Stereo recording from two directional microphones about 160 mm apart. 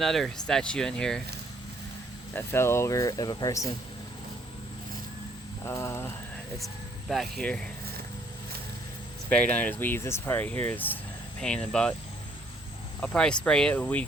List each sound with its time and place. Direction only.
0.0 s speech: centre (ahead or behind)
2.3 s speech: 15° left (ahead or behind)
5.6 s a sound: 15° left (ahead or behind)
7.1 s speech: centre (ahead or behind)
9.3 s speech: 10° left (ahead or behind)
13.0 s speech: 5° left (ahead or behind)